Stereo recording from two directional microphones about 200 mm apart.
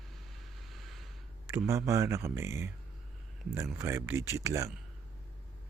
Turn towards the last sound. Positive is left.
turn(degrees=-15)  # may be behind; listen again after turning